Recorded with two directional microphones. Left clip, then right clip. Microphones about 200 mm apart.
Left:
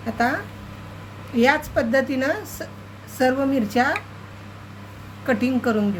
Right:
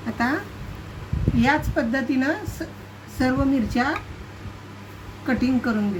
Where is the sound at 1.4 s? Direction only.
45° left (ahead or behind).